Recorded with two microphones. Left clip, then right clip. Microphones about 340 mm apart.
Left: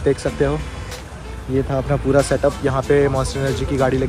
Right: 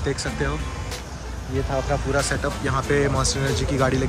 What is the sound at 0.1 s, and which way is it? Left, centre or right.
Speech, centre.